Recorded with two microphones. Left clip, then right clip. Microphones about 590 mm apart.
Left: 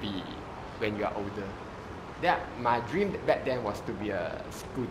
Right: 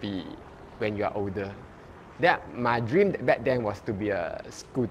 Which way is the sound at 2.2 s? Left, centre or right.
Right.